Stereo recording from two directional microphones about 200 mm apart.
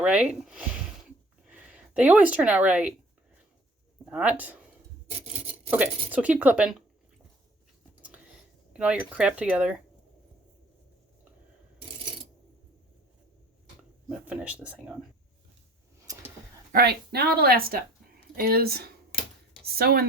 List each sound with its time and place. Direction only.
0.0 s speech: 5° right (ahead or behind)
4.0 s speech: 5° right (ahead or behind)
5.7 s a woman's voice: 10° right (ahead or behind)
8.7 s speech: 5° right (ahead or behind)
14.1 s a woman's voice: 5° right (ahead or behind)
16.7 s a woman's voice: 55° right (ahead or behind)